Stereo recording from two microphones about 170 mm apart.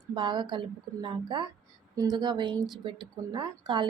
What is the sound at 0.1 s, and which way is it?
A woman's voice, 25° right (ahead or behind).